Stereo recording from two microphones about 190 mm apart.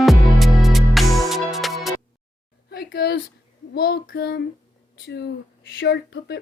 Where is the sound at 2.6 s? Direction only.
55° left (ahead or behind).